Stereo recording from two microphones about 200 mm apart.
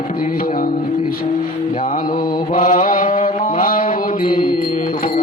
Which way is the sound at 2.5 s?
40° left (ahead or behind).